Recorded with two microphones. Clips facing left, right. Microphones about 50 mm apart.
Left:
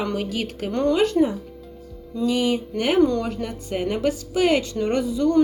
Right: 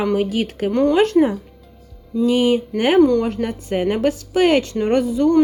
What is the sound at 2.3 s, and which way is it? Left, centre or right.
A woman's voice, right.